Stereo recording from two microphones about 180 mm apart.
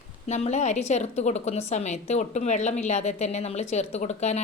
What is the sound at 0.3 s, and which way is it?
A woman's voice, 40° left (ahead or behind).